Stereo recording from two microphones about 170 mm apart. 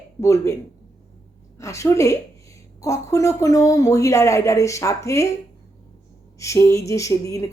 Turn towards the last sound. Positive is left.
turn(degrees=20)  # may be behind; listen again after turning